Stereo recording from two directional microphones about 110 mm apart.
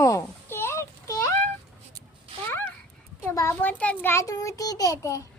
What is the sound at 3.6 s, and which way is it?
Speech, 15° left (ahead or behind).